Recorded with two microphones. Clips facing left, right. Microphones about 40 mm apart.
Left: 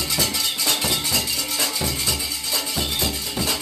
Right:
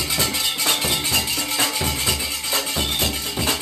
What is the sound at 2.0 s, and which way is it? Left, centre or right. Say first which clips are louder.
Music: right 2 dB; right.